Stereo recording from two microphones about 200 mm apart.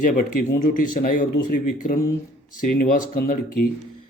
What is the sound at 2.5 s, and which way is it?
A man's voice, 45° left (ahead or behind).